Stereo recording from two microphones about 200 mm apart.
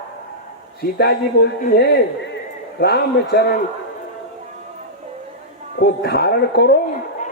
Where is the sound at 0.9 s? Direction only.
55° left (ahead or behind).